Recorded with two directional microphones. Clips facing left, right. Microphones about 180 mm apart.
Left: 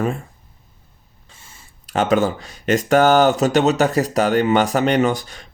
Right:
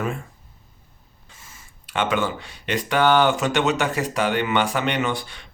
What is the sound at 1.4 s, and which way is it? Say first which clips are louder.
Speech: even; 35° left (ahead or behind).